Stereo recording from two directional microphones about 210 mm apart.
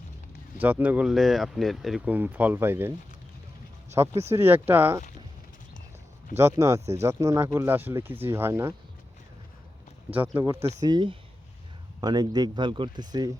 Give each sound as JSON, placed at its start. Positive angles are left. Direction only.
{"t": 0.6, "sound": "speech", "side_deg": -10}
{"t": 4.1, "sound": "speech", "side_deg": -30}
{"t": 4.4, "sound": "speech", "side_deg": -10}
{"t": 6.6, "sound": "speech", "side_deg": -15}
{"t": 10.1, "sound": "speech", "side_deg": -10}